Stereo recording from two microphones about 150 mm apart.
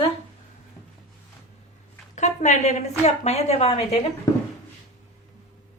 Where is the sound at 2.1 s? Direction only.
50° left (ahead or behind).